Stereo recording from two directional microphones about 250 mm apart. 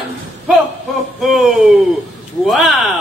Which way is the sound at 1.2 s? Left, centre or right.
Centre.